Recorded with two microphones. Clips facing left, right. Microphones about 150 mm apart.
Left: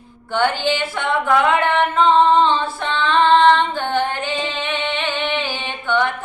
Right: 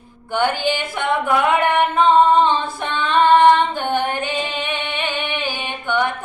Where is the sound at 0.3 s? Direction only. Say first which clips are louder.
Left 1 dB; 15° right (ahead or behind).